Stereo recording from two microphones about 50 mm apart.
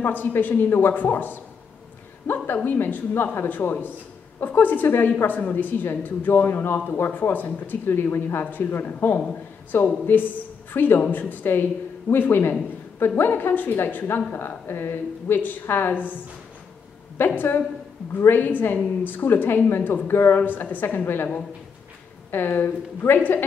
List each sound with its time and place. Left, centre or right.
0.0 s a woman's voice: left
7.8 s a woman's voice: left
8.5 s a woman's voice: left
17.4 s a woman's voice: left
22.3 s a woman's voice: left